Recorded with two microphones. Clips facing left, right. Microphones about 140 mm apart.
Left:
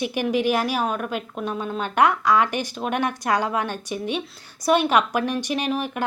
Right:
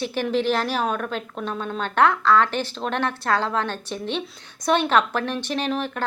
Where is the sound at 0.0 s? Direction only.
15° left (ahead or behind).